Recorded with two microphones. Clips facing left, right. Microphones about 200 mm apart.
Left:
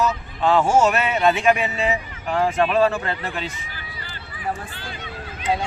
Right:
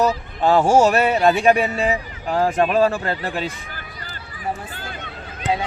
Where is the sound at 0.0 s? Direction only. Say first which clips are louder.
Right 3 dB; 35° right (ahead or behind).